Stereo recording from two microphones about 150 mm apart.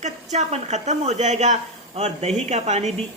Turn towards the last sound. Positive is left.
turn(degrees=-45)  # may be behind; listen again after turning